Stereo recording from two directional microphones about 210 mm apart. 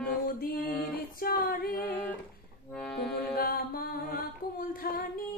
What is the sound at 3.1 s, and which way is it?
Music, 45° left (ahead or behind).